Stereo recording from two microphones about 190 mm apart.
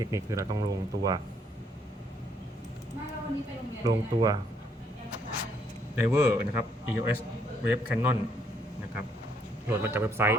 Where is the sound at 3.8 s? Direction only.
20° right (ahead or behind).